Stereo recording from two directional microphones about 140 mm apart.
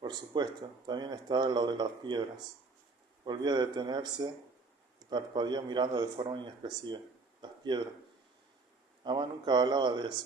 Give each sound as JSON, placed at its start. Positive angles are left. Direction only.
{"t": 0.0, "sound": "a man's voice", "side_deg": -30}
{"t": 9.0, "sound": "a man's voice", "side_deg": -30}